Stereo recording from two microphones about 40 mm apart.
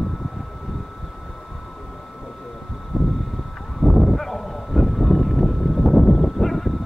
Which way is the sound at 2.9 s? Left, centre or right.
Right.